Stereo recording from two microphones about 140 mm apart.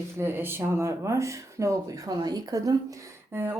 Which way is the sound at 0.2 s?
15° right (ahead or behind).